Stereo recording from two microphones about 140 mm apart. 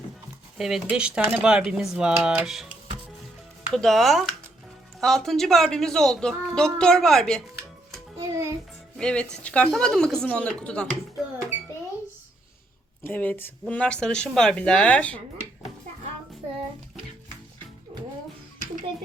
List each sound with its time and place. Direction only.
0.5 s speech: centre (ahead or behind)
3.7 s speech: centre (ahead or behind)
8.2 s music: 20° right (ahead or behind)
9.0 s speech: 5° left (ahead or behind)
11.2 s a sound: centre (ahead or behind)
13.1 s speech: 10° left (ahead or behind)